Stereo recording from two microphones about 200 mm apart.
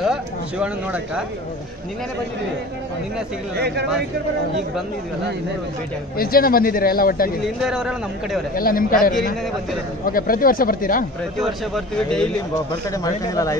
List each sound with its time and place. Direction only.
0.0 s speech: 5° right (ahead or behind)
3.5 s speech: 55° right (ahead or behind)
6.1 s speech: 45° left (ahead or behind)
7.6 s speech: 5° right (ahead or behind)
8.5 s speech: 45° left (ahead or behind)
11.3 s speech: centre (ahead or behind)
12.9 s a man's voice: 15° left (ahead or behind)